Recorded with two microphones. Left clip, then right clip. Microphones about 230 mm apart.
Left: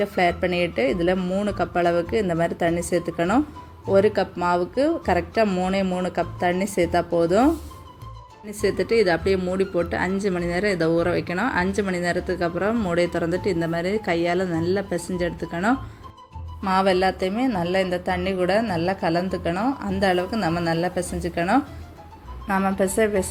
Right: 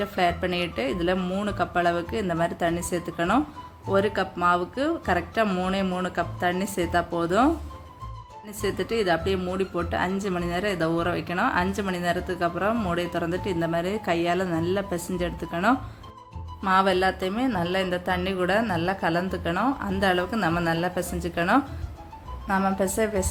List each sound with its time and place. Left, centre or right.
0.0 s speech: centre
8.6 s speech: centre